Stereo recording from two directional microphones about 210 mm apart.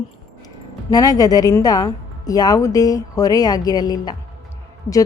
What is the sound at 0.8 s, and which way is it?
A woman's voice, 20° left (ahead or behind).